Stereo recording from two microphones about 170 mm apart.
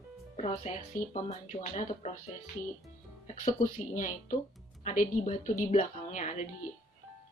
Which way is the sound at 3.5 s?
50° left (ahead or behind).